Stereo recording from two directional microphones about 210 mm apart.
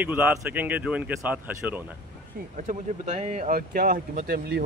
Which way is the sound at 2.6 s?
35° right (ahead or behind).